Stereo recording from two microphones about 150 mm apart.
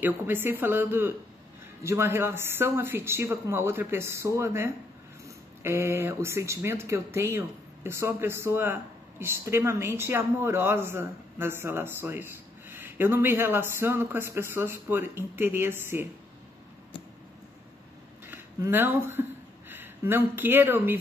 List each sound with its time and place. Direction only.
0.0 s speech: 15° right (ahead or behind)
18.2 s speech: 15° right (ahead or behind)